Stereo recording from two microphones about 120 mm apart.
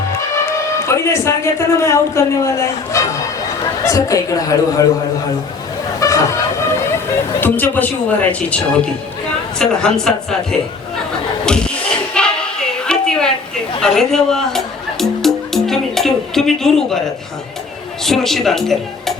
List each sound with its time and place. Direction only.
0.9 s a man's voice: 25° left (ahead or behind)
6.0 s a sound: 25° left (ahead or behind)
7.4 s a woman's voice: 15° left (ahead or behind)
11.4 s a sound: 5° left (ahead or behind)
13.8 s music: 5° left (ahead or behind)
18.0 s speech: 5° left (ahead or behind)